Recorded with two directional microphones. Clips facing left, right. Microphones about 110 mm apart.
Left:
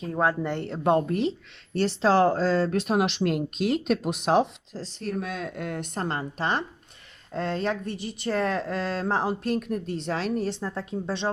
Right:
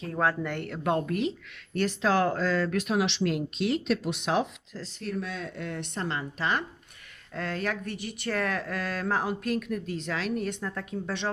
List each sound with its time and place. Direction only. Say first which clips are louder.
0.0 s speech: left 3 dB; 20° left (ahead or behind); by 2.9 s 35° left (ahead or behind)
2.9 s speech: left 2 dB; 50° left (ahead or behind)
7.3 s speech: left 4 dB; 25° left (ahead or behind)